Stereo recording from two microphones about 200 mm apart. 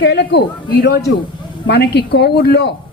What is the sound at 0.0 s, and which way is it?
A man's voice, 60° left (ahead or behind).